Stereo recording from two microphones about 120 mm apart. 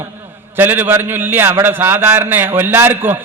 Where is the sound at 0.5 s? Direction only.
15° right (ahead or behind).